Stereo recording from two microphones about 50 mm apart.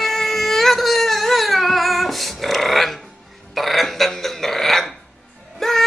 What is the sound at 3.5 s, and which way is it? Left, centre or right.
Dog, centre.